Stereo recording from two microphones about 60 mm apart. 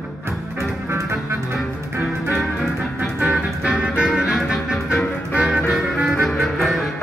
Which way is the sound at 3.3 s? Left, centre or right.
Centre.